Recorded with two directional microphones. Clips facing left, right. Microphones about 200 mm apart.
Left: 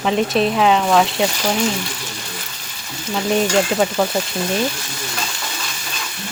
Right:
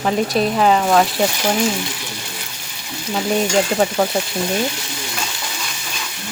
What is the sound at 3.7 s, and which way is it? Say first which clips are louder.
Speech: right 1 dB; 10° right (ahead or behind).